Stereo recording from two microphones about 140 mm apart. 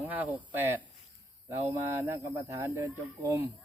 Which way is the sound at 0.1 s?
15° right (ahead or behind).